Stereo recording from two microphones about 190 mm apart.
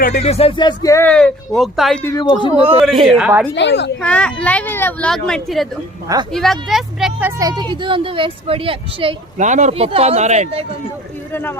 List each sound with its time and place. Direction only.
0.0 s speech: 35° left (ahead or behind); by 2.0 s centre (ahead or behind)
2.2 s speech: 25° left (ahead or behind)
2.6 s speech: 30° right (ahead or behind)
3.1 s speech: 5° right (ahead or behind)
3.5 s a woman's voice: 65° left (ahead or behind)
4.0 s speech: 5° left (ahead or behind); by 9.1 s 30° right (ahead or behind)
9.4 s speech: 40° right (ahead or behind)
11.3 s speech: 10° left (ahead or behind)